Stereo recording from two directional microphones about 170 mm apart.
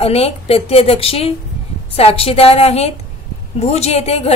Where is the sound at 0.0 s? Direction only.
35° left (ahead or behind).